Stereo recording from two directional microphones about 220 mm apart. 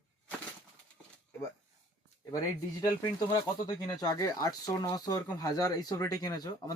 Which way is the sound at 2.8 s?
15° left (ahead or behind).